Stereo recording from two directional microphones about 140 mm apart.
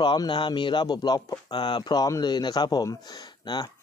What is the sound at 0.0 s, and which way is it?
Speech, 30° left (ahead or behind).